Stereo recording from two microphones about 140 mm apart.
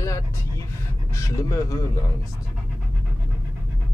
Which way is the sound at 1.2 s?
25° left (ahead or behind).